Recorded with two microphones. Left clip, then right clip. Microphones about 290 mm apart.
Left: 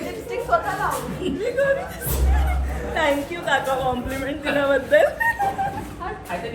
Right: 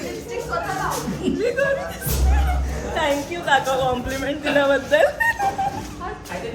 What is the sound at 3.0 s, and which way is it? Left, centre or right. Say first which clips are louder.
Speech: left 1 dB; centre.